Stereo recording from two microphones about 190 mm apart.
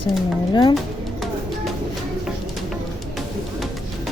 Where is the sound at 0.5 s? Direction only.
25° left (ahead or behind).